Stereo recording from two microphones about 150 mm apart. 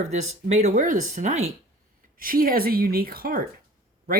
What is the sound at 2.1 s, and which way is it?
A woman's voice, 70° right (ahead or behind).